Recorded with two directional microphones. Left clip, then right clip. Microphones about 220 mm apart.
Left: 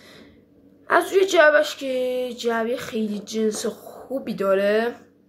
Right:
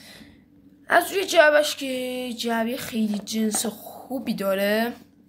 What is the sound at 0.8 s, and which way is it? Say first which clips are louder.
A woman's voice: left 2 dB; 10° right (ahead or behind).